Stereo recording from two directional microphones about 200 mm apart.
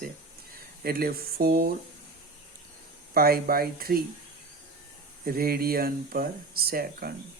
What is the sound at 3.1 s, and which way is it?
Speech, 50° right (ahead or behind).